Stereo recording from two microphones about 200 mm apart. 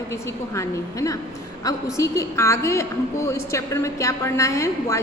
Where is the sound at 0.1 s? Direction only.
15° left (ahead or behind).